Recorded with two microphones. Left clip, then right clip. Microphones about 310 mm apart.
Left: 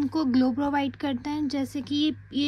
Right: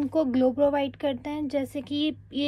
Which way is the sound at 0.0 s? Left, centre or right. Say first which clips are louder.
Right 2 dB; centre.